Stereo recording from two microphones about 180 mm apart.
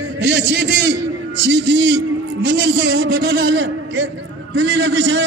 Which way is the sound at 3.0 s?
65° right (ahead or behind).